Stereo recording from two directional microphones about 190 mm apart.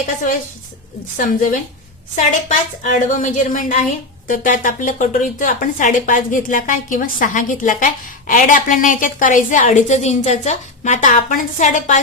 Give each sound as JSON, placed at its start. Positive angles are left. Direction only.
{"t": 1.1, "sound": "a woman's voice", "side_deg": 45}